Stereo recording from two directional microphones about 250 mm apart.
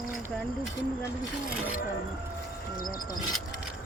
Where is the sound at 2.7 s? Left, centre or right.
Left.